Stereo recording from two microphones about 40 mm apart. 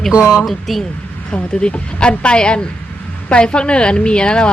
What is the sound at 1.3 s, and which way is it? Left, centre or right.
A woman's voice, left.